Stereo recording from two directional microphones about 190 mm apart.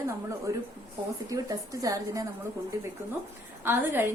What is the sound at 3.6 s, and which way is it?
Speech, 10° right (ahead or behind).